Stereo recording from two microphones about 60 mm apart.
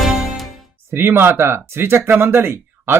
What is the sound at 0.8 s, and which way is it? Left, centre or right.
Speech, right.